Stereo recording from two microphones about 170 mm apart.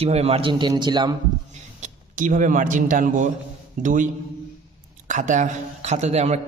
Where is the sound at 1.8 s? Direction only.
50° right (ahead or behind).